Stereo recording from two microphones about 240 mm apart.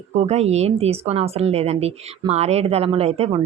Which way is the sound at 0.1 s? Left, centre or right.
Right.